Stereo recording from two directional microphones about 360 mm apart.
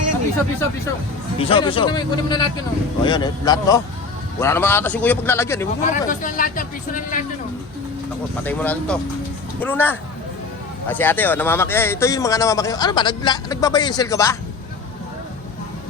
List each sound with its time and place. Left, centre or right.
1.4 s speech: centre
5.8 s speech: left
8.4 s speech: centre